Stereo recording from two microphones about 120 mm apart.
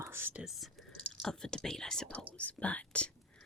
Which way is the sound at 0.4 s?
Centre (ahead or behind).